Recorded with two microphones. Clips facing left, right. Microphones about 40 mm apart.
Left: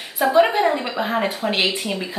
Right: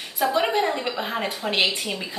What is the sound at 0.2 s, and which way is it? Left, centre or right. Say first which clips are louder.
A woman's voice: left 6 dB; left.